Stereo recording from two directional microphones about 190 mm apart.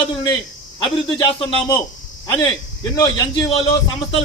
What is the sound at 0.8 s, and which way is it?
Speech, 25° left (ahead or behind).